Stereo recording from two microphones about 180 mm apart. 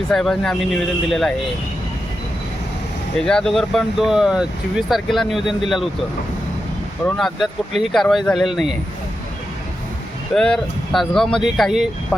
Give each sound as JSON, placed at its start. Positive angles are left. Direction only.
{"t": 0.1, "sound": "speech", "side_deg": 5}
{"t": 3.2, "sound": "speech", "side_deg": 5}
{"t": 7.0, "sound": "speech", "side_deg": 0}
{"t": 10.3, "sound": "speech", "side_deg": 0}